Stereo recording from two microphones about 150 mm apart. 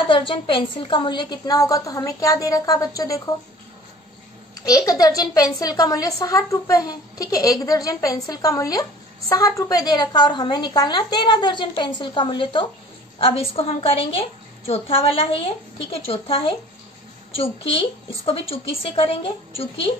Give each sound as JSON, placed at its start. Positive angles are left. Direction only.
{"t": 0.1, "sound": "speech", "side_deg": 35}
{"t": 4.6, "sound": "a woman's voice", "side_deg": 25}